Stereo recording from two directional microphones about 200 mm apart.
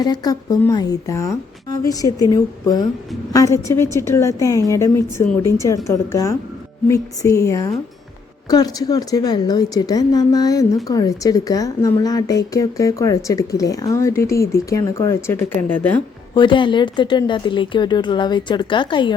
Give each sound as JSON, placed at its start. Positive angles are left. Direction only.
{"t": 0.0, "sound": "a woman's voice", "side_deg": 20}
{"t": 16.3, "sound": "a woman's voice", "side_deg": 25}